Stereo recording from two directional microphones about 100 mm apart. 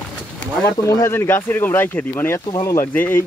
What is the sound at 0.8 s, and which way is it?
Speech, 25° left (ahead or behind).